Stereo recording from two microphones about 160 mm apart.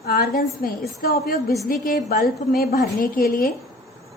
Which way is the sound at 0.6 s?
65° left (ahead or behind).